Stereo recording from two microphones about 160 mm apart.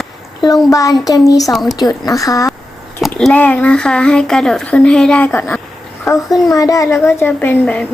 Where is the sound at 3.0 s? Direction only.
5° left (ahead or behind).